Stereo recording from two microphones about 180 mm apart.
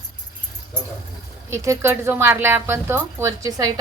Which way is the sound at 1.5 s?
15° right (ahead or behind).